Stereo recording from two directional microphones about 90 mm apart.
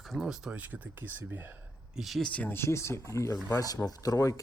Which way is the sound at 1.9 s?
Centre (ahead or behind).